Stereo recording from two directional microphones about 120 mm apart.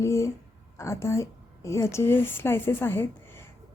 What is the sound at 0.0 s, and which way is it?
Speech, 25° left (ahead or behind).